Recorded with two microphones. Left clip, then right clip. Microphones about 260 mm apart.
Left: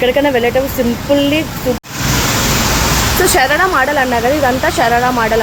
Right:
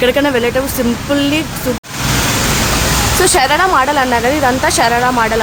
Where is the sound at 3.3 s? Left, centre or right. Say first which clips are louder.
Right 1 dB; centre.